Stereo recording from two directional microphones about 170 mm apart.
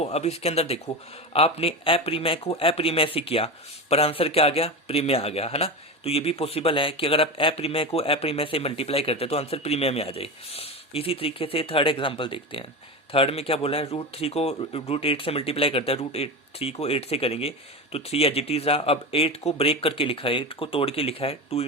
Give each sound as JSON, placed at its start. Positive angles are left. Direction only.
{"t": 0.0, "sound": "speech", "side_deg": 40}